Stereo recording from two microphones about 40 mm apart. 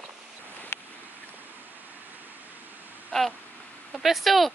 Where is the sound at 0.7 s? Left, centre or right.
Left.